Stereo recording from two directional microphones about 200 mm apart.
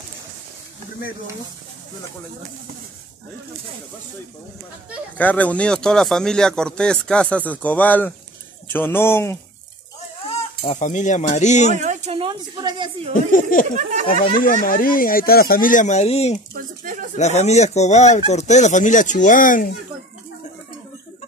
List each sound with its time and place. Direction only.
5.1 s speech: 10° left (ahead or behind)
10.6 s speech: 35° left (ahead or behind)
11.7 s speech: 35° right (ahead or behind)
13.1 s speech: 40° left (ahead or behind)
13.7 s speech: 35° right (ahead or behind)
14.4 s speech: 45° left (ahead or behind)
16.5 s a sound: 45° right (ahead or behind)
17.2 s speech: 35° left (ahead or behind)